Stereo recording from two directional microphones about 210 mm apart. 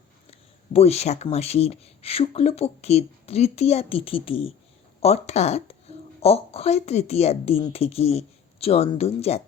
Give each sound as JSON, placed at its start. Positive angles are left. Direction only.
{"t": 0.3, "sound": "speech", "side_deg": 30}